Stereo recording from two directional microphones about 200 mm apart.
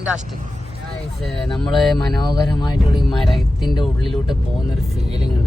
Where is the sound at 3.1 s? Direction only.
Centre (ahead or behind).